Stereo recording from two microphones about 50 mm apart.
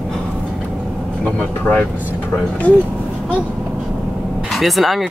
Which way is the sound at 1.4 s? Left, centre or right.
Left.